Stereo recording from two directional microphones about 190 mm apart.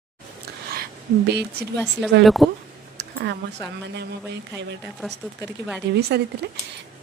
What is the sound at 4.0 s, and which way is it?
Speech, 65° right (ahead or behind).